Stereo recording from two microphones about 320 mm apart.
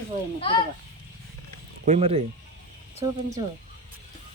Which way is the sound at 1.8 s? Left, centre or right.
Centre.